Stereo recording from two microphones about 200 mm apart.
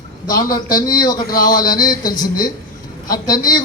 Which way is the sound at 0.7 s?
20° left (ahead or behind).